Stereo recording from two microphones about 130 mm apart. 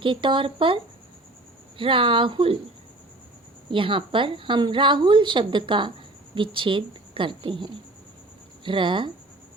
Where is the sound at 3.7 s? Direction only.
40° right (ahead or behind).